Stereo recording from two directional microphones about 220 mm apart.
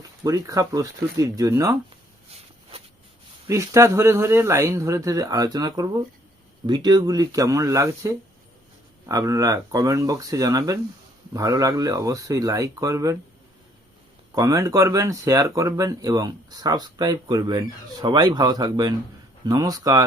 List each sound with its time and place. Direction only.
0.3 s speech: 15° right (ahead or behind)
3.4 s speech: 15° right (ahead or behind)
14.3 s speech: 15° right (ahead or behind)